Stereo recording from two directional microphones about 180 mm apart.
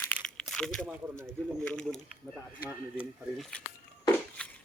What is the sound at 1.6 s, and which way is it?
Speech, 5° left (ahead or behind).